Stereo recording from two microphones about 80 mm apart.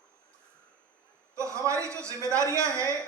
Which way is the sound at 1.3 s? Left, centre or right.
Right.